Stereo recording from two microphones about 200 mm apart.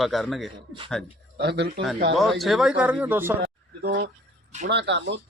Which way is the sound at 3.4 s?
50° right (ahead or behind).